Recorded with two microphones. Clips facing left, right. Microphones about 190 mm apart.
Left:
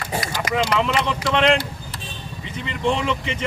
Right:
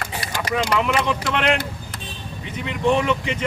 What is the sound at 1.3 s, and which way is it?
Speech, 5° right (ahead or behind).